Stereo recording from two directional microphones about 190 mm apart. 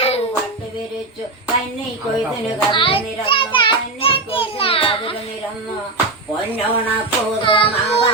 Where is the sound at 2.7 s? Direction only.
25° left (ahead or behind).